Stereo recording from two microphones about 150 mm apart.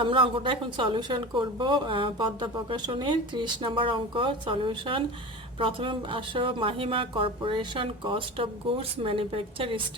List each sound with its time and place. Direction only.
0.0 s speech: 35° right (ahead or behind)